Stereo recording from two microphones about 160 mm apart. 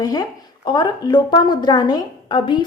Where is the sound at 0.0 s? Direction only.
25° left (ahead or behind).